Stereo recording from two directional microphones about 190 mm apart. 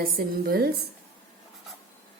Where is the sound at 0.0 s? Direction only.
50° right (ahead or behind).